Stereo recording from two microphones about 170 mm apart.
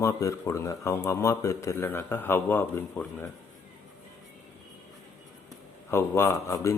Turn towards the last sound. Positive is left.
turn(degrees=20)  # may be behind; listen again after turning